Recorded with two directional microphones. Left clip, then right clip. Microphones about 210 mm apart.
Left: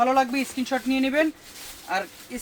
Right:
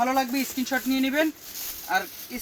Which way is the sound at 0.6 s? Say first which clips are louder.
Left 1 dB; 25° left (ahead or behind).